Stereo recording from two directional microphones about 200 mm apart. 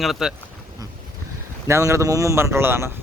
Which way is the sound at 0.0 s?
Centre (ahead or behind).